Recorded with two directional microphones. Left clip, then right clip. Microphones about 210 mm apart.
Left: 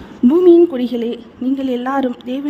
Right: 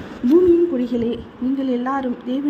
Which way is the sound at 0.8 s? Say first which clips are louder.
Left 2 dB; 35° left (ahead or behind).